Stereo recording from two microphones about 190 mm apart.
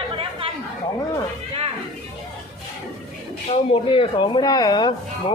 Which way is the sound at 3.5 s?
25° left (ahead or behind).